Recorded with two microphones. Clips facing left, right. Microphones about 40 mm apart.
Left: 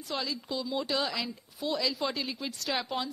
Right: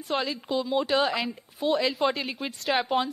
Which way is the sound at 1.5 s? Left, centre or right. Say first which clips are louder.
Right 7 dB; right.